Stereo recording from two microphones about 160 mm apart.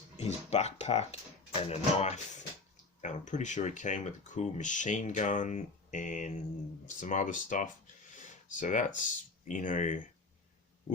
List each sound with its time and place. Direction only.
0.2 s speech: 45° left (ahead or behind)